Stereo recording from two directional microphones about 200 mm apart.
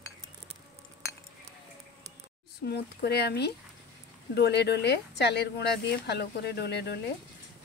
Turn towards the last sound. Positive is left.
turn(degrees=55)  # may be behind; listen again after turning